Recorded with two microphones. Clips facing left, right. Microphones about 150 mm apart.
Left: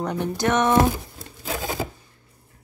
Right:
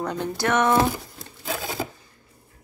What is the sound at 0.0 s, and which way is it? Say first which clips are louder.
Speech: left 2 dB; 15° left (ahead or behind).